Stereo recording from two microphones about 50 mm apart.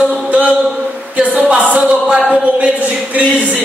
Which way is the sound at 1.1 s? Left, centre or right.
Right.